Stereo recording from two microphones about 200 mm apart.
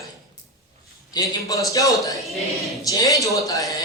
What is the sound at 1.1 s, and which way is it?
A man's voice, 15° left (ahead or behind).